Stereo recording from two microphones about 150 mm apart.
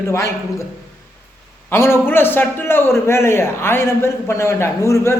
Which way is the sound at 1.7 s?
15° left (ahead or behind).